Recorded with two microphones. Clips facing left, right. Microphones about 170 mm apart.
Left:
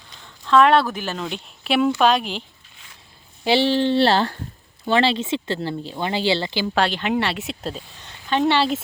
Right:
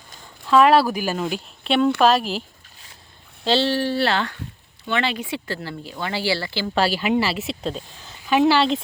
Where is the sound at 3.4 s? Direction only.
15° left (ahead or behind).